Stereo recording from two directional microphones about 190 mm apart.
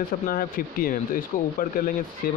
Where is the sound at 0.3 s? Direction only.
50° left (ahead or behind).